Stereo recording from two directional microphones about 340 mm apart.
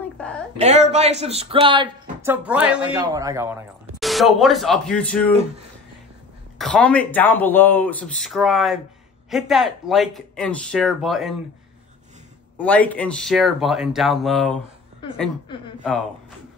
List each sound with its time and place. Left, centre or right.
0.6 s speech: centre
6.6 s speech: centre
12.5 s speech: centre